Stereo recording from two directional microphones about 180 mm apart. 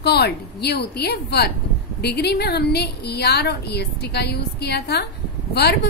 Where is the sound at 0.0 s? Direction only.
65° left (ahead or behind).